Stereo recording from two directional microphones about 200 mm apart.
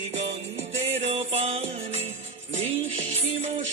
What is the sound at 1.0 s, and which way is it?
Music, 30° right (ahead or behind).